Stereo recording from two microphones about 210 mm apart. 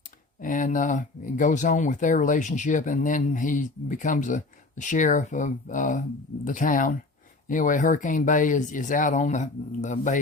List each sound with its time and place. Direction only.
0.4 s speech: 40° left (ahead or behind)